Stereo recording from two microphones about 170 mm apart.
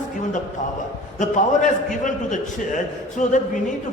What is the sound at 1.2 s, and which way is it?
A man's voice, 45° left (ahead or behind).